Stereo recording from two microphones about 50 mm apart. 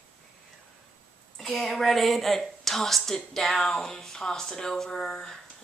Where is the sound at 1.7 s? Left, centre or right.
Centre.